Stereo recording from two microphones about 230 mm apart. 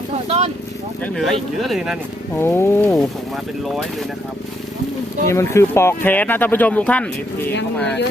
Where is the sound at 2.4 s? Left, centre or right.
Centre.